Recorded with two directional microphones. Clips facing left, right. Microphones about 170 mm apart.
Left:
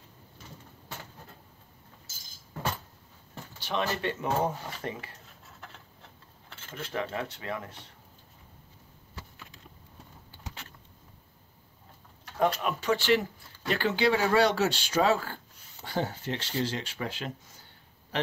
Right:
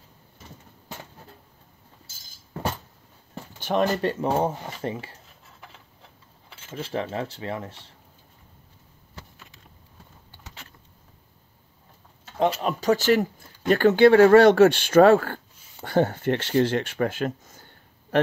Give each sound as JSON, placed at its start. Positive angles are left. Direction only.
{"t": 3.5, "sound": "speech", "side_deg": -50}
{"t": 6.7, "sound": "speech", "side_deg": -30}
{"t": 12.6, "sound": "a man's voice", "side_deg": -40}